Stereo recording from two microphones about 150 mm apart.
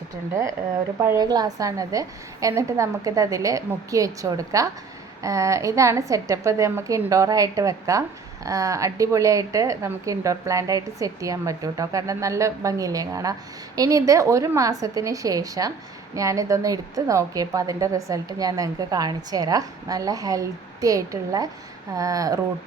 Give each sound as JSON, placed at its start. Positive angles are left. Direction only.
{"t": 1.0, "sound": "a woman's voice", "side_deg": -25}